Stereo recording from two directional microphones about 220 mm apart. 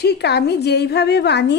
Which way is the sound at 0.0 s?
50° left (ahead or behind).